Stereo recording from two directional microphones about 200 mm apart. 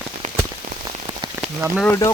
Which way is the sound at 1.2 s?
15° right (ahead or behind).